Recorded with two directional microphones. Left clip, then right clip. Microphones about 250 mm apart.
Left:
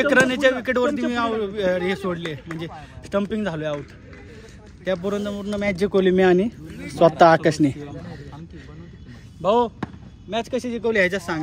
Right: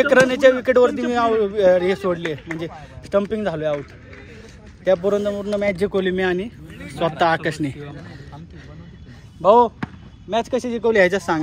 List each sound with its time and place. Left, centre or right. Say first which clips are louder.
0.0 s a man's voice: right 4 dB; centre
4.8 s a man's voice: right 7 dB; centre
5.9 s speech: left 3 dB; left
9.4 s speech: right 6 dB; centre